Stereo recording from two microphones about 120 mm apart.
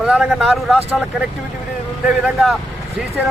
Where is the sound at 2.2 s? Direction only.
Centre (ahead or behind).